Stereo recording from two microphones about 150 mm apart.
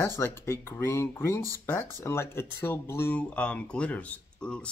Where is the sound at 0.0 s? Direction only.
15° left (ahead or behind).